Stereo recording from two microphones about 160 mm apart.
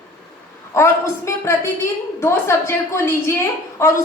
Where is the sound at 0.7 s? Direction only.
15° left (ahead or behind).